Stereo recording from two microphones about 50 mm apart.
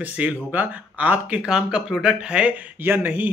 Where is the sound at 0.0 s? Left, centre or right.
Right.